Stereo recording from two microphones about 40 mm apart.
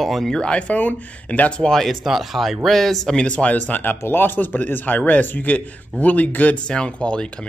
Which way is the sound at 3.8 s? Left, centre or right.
Left.